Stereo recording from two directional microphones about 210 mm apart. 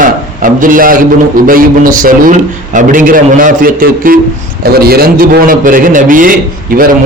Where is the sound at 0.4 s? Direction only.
40° right (ahead or behind).